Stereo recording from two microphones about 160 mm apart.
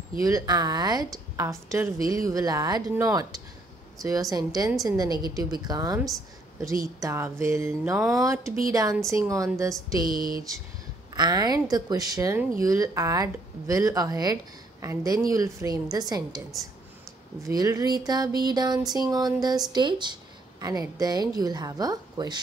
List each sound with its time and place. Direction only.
0.2 s speech: 20° right (ahead or behind)
7.0 s a sound: 15° right (ahead or behind)
8.2 s speech: 20° right (ahead or behind)
10.0 s a sound: 65° right (ahead or behind)
11.1 s speech: 25° right (ahead or behind)
17.5 s speech: 20° right (ahead or behind)